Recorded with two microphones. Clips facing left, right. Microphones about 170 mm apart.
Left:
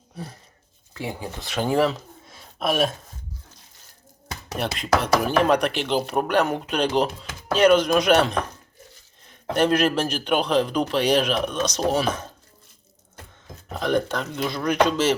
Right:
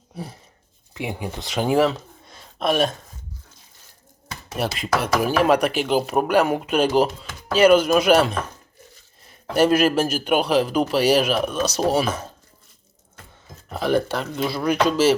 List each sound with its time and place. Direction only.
0.9 s speech: 15° right (ahead or behind)
1.8 s a sound: centre (ahead or behind)
4.5 s speech: 5° right (ahead or behind)
9.5 s speech: 5° right (ahead or behind)
13.7 s speech: 5° right (ahead or behind)